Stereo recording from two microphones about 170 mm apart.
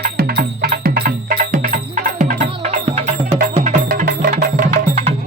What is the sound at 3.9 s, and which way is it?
Music, 55° right (ahead or behind).